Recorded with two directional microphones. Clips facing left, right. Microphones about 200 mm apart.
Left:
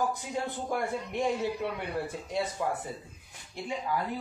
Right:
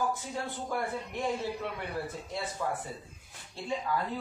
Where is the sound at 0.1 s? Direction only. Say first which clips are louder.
Left 2 dB; 15° left (ahead or behind).